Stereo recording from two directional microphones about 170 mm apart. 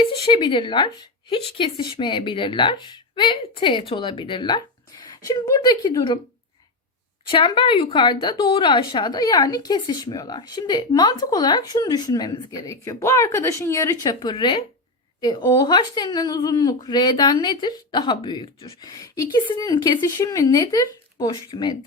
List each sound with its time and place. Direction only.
0.0 s speech: 30° left (ahead or behind)
7.3 s speech: 30° left (ahead or behind)